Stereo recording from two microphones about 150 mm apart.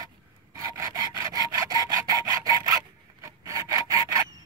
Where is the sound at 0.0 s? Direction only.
25° right (ahead or behind).